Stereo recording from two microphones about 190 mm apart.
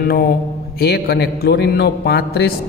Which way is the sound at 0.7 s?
55° left (ahead or behind).